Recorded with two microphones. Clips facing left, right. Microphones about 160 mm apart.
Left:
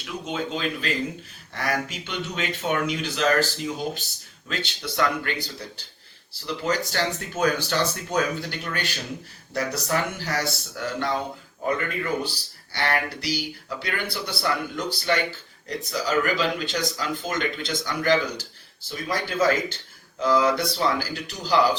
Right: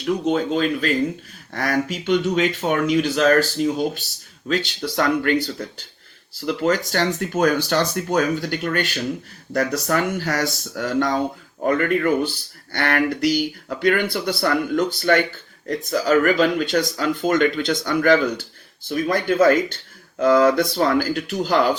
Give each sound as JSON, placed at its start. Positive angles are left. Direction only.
{"t": 0.0, "sound": "speech", "side_deg": -45}